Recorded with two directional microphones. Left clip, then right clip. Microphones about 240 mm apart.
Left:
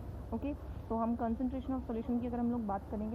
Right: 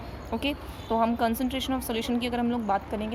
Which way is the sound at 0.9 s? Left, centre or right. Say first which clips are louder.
Right 11 dB; right.